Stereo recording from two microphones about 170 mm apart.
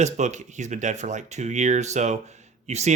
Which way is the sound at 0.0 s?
45° right (ahead or behind).